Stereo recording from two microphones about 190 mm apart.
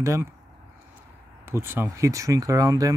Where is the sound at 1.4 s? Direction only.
10° right (ahead or behind).